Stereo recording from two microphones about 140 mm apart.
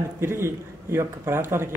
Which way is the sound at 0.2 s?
20° right (ahead or behind).